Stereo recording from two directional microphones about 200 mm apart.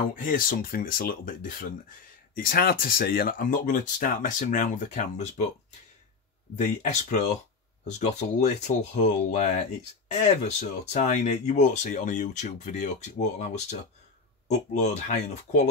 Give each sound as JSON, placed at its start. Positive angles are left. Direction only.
{"t": 0.1, "sound": "speech", "side_deg": 40}
{"t": 6.5, "sound": "speech", "side_deg": 40}